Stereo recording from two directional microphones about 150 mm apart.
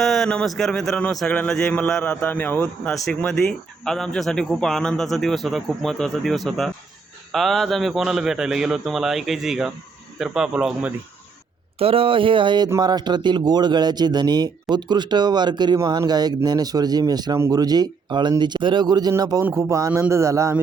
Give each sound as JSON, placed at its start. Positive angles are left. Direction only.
{"t": 0.0, "sound": "a man's voice", "side_deg": 0}
{"t": 11.8, "sound": "speech", "side_deg": -40}